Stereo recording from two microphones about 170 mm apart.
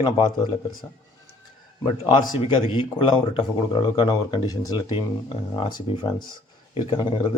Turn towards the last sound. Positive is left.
turn(degrees=30)  # may be behind; listen again after turning